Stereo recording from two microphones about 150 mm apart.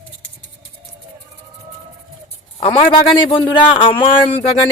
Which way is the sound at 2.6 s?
35° left (ahead or behind).